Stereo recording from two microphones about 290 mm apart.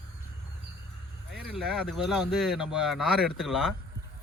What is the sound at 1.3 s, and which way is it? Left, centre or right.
Speech, centre.